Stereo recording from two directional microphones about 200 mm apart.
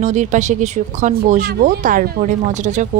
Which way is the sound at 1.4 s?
50° right (ahead or behind).